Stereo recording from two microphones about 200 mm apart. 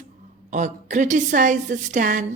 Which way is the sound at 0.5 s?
35° right (ahead or behind).